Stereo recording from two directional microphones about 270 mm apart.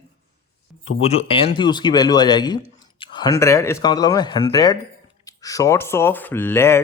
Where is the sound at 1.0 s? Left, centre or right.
Left.